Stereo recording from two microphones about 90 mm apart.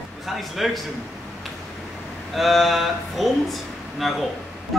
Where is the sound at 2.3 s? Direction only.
Centre (ahead or behind).